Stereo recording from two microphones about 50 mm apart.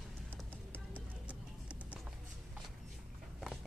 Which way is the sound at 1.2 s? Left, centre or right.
Right.